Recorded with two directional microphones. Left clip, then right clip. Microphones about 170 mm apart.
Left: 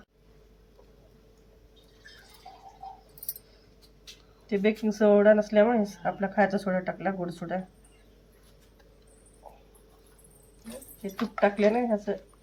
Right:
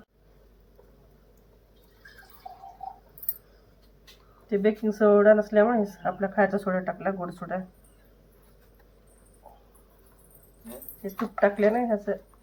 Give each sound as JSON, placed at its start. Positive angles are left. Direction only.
{"t": 4.4, "sound": "speech", "side_deg": 15}
{"t": 11.3, "sound": "speech", "side_deg": 10}